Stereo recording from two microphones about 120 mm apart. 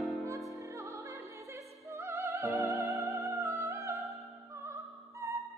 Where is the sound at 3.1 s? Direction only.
25° right (ahead or behind).